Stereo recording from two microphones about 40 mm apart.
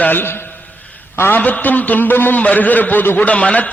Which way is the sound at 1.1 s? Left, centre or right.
Left.